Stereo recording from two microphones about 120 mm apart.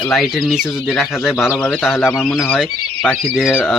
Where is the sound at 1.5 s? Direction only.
10° left (ahead or behind).